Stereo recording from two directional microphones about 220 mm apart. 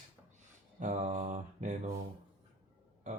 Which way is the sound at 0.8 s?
35° right (ahead or behind).